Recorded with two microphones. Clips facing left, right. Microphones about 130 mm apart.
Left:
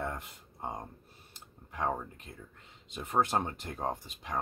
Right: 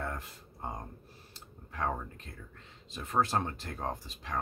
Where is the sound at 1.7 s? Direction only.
15° left (ahead or behind).